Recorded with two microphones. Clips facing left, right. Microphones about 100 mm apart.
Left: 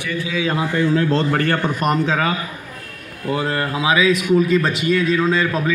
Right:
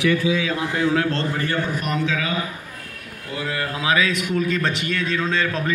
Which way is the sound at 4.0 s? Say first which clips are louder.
Left 6 dB; 5° left (ahead or behind).